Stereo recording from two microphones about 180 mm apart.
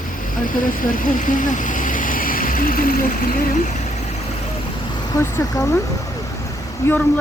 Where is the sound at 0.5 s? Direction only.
50° left (ahead or behind).